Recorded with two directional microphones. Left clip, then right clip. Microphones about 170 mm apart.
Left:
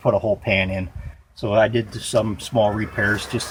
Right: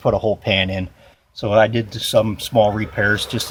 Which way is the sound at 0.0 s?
35° right (ahead or behind).